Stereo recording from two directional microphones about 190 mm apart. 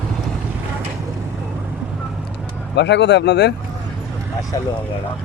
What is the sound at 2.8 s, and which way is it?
Speech, 65° left (ahead or behind).